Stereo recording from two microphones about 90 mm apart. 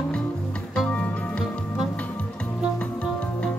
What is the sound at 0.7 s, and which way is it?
Music, 15° left (ahead or behind).